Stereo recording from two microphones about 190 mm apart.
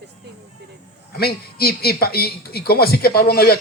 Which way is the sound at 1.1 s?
55° left (ahead or behind).